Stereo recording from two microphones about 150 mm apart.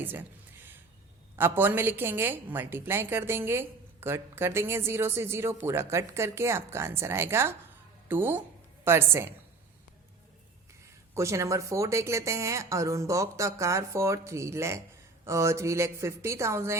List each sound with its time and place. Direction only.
0.0 s speech: 15° right (ahead or behind)
1.4 s a woman's voice: 15° right (ahead or behind)
11.1 s a woman's voice: 20° right (ahead or behind)